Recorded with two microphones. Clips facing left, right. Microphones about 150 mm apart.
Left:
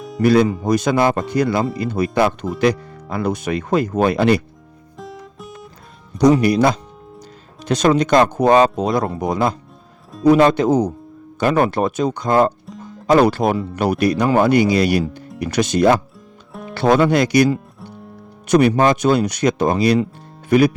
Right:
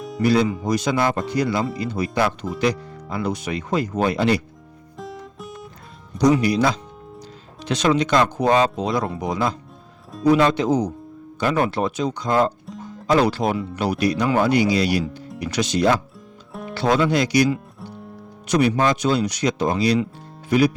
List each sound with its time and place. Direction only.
0.2 s speech: 55° left (ahead or behind)
4.9 s music: centre (ahead or behind)
6.4 s speech: 50° left (ahead or behind)
16.5 s music: centre (ahead or behind)
16.7 s speech: 55° left (ahead or behind)